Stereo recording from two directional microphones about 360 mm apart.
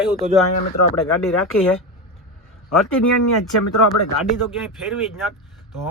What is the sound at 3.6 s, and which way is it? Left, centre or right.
Speech, left.